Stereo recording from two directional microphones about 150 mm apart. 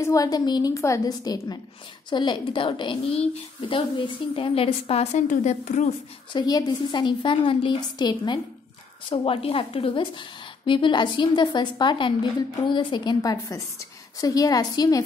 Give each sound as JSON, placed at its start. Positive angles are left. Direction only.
{"t": 0.0, "sound": "a woman's voice", "side_deg": 20}
{"t": 6.3, "sound": "a woman's voice", "side_deg": 30}